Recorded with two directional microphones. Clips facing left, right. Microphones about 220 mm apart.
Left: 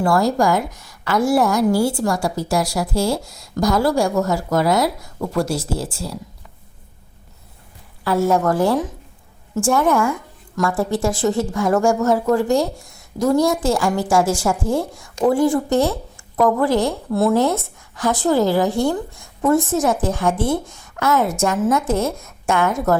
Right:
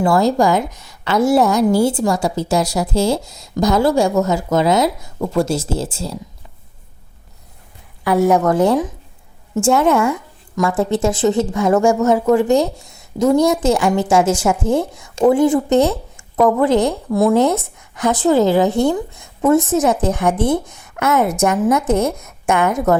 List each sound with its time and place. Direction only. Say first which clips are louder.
0.0 s a woman's voice: right 3 dB; 20° right (ahead or behind)
8.0 s a woman's voice: right 3 dB; 15° right (ahead or behind)